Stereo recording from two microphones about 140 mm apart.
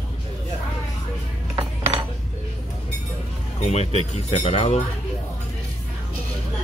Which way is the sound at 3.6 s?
50° left (ahead or behind).